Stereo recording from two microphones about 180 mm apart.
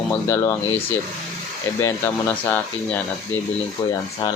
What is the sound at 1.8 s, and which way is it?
Speech, 10° left (ahead or behind).